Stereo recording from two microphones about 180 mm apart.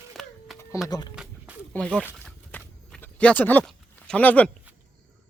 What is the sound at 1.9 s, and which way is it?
Speech, 5° right (ahead or behind).